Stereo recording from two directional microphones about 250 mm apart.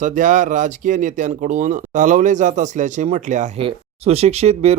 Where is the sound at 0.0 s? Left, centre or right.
Right.